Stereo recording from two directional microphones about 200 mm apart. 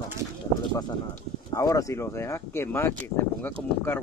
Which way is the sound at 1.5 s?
15° left (ahead or behind).